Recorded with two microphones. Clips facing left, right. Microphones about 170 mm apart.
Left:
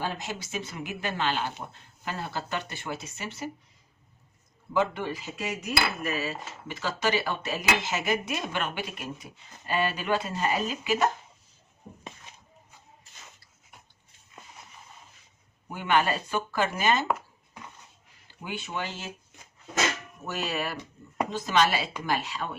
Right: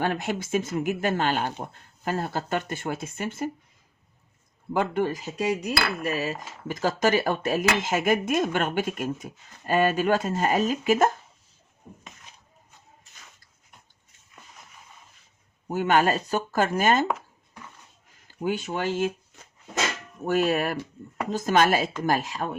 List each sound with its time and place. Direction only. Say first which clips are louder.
0.0 s speech: right 7 dB; 60° right (ahead or behind)
4.7 s cutlery: right 3 dB; 50° right (ahead or behind)
6.0 s speech: right 3 dB; 40° right (ahead or behind)
15.7 s speech: right 4 dB; 40° right (ahead or behind)
17.1 s a sound: even; 10° left (ahead or behind)
18.3 s speech: right 9 dB; 45° right (ahead or behind)
19.3 s a sound: right 2 dB; 20° left (ahead or behind)
20.2 s speech: right 9 dB; 50° right (ahead or behind)